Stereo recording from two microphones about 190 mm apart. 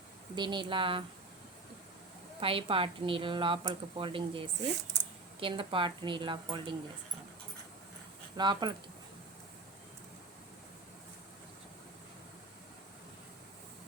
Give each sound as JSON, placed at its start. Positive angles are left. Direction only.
{"t": 0.3, "sound": "a woman's voice", "side_deg": -25}
{"t": 2.4, "sound": "a woman's voice", "side_deg": -30}
{"t": 8.4, "sound": "a woman's voice", "side_deg": -25}